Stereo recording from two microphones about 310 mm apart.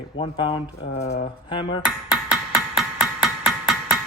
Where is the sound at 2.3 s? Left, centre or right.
Centre.